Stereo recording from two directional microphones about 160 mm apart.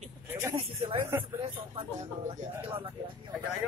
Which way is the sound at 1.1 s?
10° right (ahead or behind).